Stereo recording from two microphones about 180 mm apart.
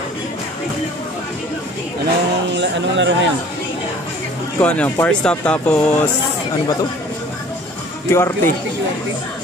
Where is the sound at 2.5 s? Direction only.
85° right.